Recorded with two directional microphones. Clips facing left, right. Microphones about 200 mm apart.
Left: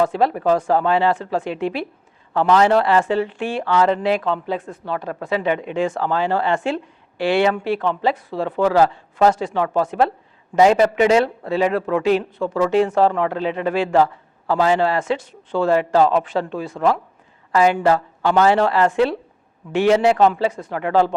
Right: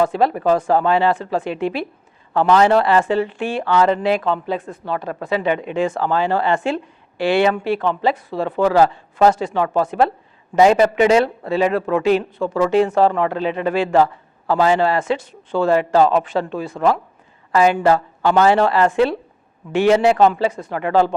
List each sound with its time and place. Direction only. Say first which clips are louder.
0.0 s a man's voice: right 1 dB; 10° right (ahead or behind)
20.3 s a man's voice: right 1 dB; 20° right (ahead or behind)